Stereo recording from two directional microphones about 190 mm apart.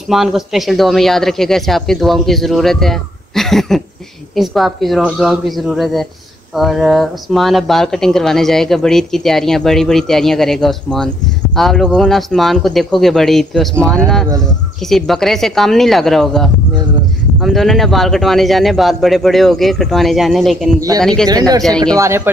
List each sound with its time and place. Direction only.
0.1 s speech: centre (ahead or behind)
21.3 s speech: 20° right (ahead or behind)